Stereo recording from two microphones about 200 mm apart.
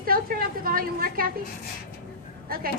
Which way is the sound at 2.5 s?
45° right (ahead or behind).